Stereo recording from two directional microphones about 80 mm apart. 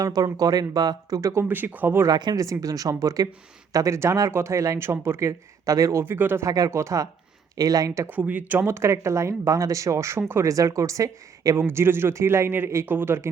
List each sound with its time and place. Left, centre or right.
0.0 s speech: right
2.0 s speech: right
2.4 s speech: right
6.4 s speech: right
6.7 s speech: right
8.2 s speech: centre
8.6 s speech: right
10.5 s speech: right
11.6 s speech: right